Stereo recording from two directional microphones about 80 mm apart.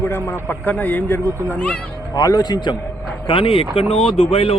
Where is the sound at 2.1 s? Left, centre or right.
Left.